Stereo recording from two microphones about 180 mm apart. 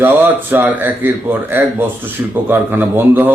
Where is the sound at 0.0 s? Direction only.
10° right (ahead or behind).